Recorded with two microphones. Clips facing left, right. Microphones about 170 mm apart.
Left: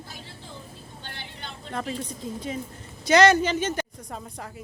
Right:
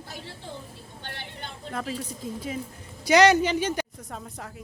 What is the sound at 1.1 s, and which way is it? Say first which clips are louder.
Vehicle: right 2 dB; 55° right (ahead or behind).